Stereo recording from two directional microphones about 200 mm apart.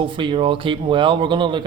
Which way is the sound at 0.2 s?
25° right (ahead or behind).